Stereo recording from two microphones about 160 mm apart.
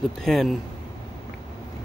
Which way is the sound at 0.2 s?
Centre (ahead or behind).